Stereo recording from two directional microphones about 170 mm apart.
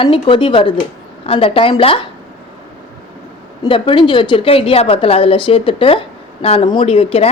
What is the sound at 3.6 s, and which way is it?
A woman's voice, 30° left (ahead or behind).